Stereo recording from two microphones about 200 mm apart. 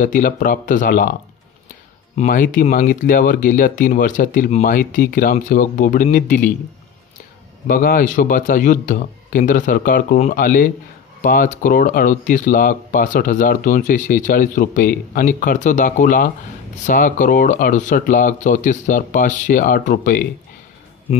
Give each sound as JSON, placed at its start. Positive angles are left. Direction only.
{"t": 0.0, "sound": "speech", "side_deg": 40}
{"t": 2.1, "sound": "speech", "side_deg": 40}
{"t": 7.6, "sound": "speech", "side_deg": 45}